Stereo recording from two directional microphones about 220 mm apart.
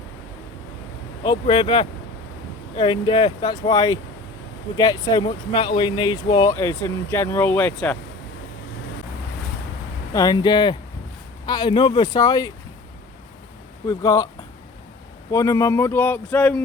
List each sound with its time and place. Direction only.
1.2 s speech: 20° left (ahead or behind)
10.1 s speech: 15° left (ahead or behind)
13.8 s speech: 15° left (ahead or behind)
15.3 s speech: 15° left (ahead or behind)